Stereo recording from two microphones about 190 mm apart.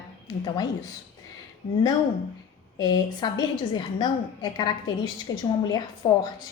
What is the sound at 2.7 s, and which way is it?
A woman's voice, 20° left (ahead or behind).